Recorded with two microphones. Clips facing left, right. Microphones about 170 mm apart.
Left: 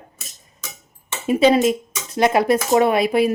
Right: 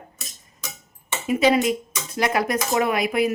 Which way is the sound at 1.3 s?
30° left (ahead or behind).